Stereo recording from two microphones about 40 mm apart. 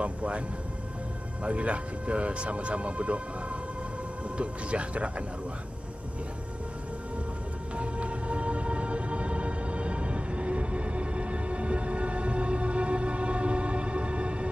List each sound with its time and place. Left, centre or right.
0.0 s music: right
1.4 s speech: right
7.7 s music: right